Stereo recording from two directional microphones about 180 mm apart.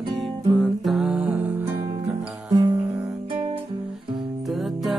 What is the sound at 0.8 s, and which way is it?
Music, centre (ahead or behind).